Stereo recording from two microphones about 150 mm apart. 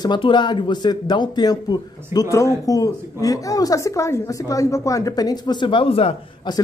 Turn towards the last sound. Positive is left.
turn(degrees=40)  # may be behind; listen again after turning